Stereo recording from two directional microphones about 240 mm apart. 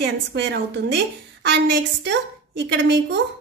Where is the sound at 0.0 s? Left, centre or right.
Right.